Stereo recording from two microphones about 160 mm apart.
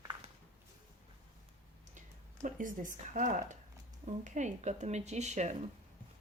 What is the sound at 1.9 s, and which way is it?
Speech, 50° right (ahead or behind).